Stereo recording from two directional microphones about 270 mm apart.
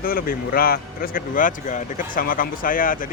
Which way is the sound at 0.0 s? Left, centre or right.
Left.